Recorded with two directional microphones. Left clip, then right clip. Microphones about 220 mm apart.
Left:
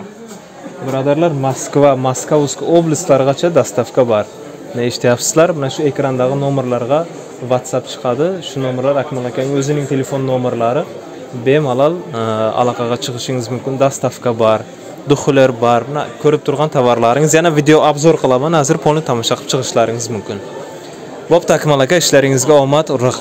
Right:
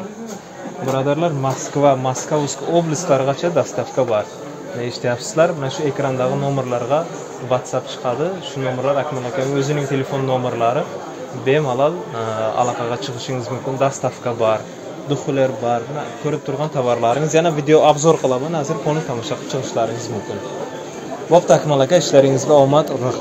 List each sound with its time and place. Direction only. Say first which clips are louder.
0.9 s a man's voice: left 6 dB; 45° left (ahead or behind)
9.6 s a man's voice: left 3 dB; 50° left (ahead or behind)
21.3 s a man's voice: left 2 dB; 45° left (ahead or behind)